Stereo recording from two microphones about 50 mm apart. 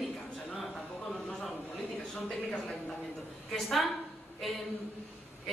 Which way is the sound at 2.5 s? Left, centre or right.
Left.